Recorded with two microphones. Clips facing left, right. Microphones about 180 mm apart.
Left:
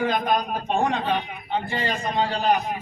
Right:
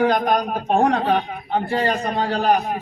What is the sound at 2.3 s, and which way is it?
Speech, 65° right (ahead or behind).